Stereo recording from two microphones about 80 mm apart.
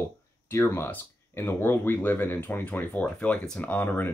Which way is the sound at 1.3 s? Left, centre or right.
Left.